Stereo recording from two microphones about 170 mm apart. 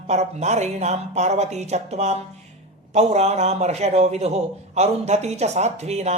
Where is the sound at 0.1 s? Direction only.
40° right (ahead or behind).